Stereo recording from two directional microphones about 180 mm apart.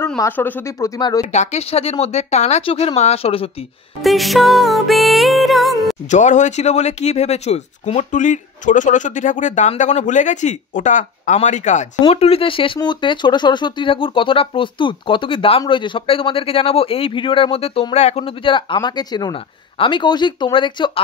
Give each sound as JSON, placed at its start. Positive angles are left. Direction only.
{"t": 0.0, "sound": "speech", "side_deg": 10}
{"t": 1.3, "sound": "speech", "side_deg": 40}
{"t": 4.0, "sound": "music", "side_deg": 0}
{"t": 6.0, "sound": "speech", "side_deg": 45}